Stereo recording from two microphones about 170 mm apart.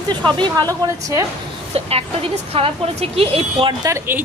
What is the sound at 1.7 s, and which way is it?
A woman's voice, 35° right (ahead or behind).